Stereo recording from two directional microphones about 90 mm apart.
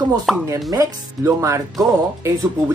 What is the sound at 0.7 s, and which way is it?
Speech, 35° right (ahead or behind).